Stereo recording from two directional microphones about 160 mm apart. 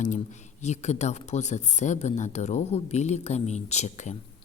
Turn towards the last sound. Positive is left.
turn(degrees=45)  # may be behind; listen again after turning